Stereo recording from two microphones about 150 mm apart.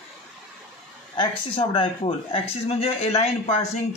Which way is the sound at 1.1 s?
35° left (ahead or behind).